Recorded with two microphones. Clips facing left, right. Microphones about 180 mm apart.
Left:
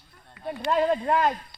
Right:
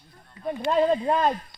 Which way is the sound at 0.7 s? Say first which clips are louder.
Right 1 dB; 20° right (ahead or behind).